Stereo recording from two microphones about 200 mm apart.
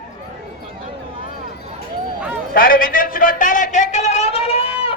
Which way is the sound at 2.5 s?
45° left (ahead or behind).